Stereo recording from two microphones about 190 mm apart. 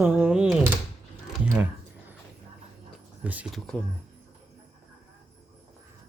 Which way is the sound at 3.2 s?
10° right (ahead or behind).